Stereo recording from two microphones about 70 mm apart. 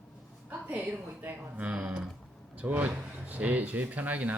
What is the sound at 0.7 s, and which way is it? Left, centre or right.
Speech, right.